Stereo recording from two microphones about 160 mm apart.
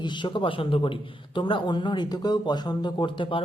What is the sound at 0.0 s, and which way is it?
A man's voice, 30° left (ahead or behind).